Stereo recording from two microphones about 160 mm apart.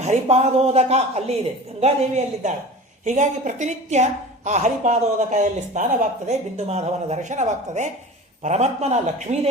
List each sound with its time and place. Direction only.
0.0 s a woman's voice: 45° right (ahead or behind)